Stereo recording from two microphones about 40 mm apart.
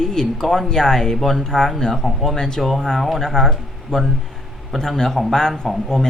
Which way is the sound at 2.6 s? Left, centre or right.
Centre.